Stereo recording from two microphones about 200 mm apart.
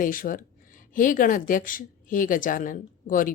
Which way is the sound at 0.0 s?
45° left (ahead or behind).